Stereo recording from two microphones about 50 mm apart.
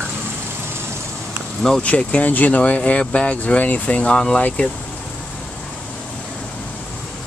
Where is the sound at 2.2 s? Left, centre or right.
Left.